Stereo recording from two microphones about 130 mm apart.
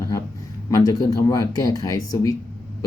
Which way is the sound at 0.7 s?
30° left (ahead or behind).